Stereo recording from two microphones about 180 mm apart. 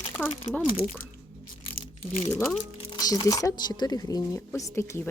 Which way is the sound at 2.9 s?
25° left (ahead or behind).